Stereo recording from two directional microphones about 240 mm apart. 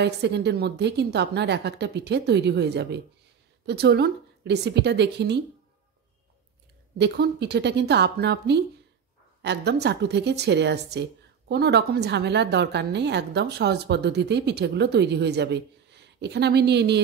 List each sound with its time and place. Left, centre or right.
0.0 s speech: right
7.0 s speech: right